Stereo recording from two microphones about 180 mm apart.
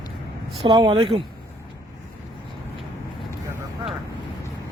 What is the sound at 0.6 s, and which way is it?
Speech, 25° right (ahead or behind).